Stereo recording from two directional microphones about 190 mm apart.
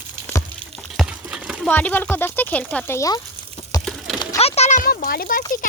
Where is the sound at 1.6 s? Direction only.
10° left (ahead or behind).